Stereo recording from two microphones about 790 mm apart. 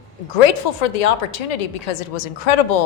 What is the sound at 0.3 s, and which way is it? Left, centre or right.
A woman's voice, left.